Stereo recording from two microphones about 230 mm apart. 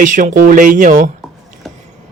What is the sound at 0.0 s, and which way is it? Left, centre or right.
Speech, right.